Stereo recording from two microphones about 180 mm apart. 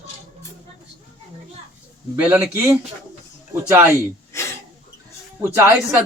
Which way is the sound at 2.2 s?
10° right (ahead or behind).